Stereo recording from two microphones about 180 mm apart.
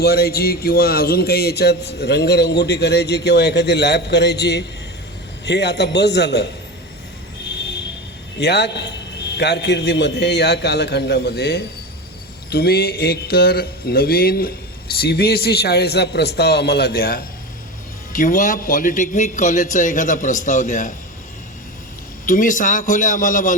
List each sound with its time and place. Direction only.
0.0 s speech: 60° left (ahead or behind)
8.4 s a man's voice: 70° left (ahead or behind); by 20.9 s 45° left (ahead or behind)
22.3 s a man's voice: 45° left (ahead or behind)